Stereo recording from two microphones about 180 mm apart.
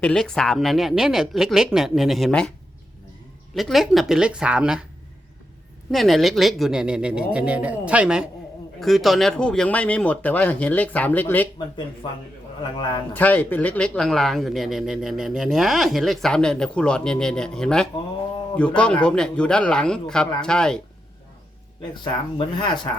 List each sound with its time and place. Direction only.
0.0 s a man's voice: 5° left (ahead or behind)
3.5 s a man's voice: centre (ahead or behind)
5.9 s a man's voice: centre (ahead or behind)
13.1 s a man's voice: 10° left (ahead or behind)
22.0 s speech: 25° left (ahead or behind)